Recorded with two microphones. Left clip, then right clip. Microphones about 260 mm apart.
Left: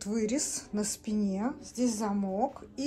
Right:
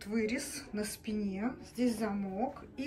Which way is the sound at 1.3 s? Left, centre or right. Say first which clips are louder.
Left 4 dB; left.